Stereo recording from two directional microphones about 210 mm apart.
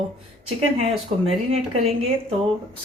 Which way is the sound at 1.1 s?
30° right (ahead or behind).